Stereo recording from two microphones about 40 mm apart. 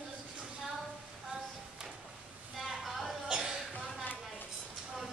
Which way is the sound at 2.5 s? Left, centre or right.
Centre.